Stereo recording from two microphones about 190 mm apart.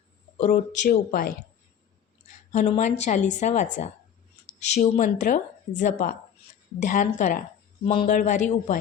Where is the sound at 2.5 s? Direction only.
35° left (ahead or behind).